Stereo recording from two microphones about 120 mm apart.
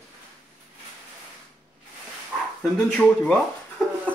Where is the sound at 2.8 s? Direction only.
10° left (ahead or behind).